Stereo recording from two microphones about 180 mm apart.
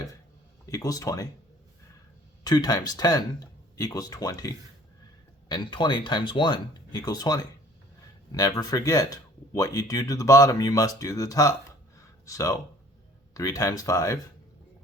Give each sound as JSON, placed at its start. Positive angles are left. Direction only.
{"t": 0.7, "sound": "speech", "side_deg": 20}
{"t": 2.4, "sound": "speech", "side_deg": 20}